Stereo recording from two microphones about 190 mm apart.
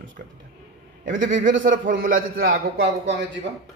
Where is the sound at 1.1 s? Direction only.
45° right (ahead or behind).